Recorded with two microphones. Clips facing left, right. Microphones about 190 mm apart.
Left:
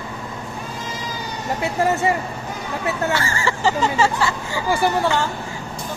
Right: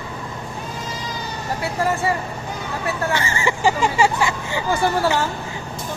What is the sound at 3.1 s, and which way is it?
Speech, 20° right (ahead or behind).